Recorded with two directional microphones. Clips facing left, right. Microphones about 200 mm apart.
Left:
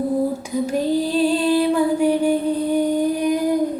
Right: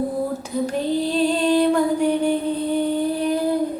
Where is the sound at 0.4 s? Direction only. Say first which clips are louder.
Left 2 dB; 10° left (ahead or behind).